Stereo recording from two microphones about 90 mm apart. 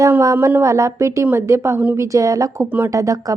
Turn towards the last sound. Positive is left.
turn(degrees=-40)  # may be behind; listen again after turning